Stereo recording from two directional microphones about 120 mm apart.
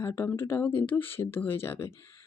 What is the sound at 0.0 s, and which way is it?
Speech, 20° left (ahead or behind).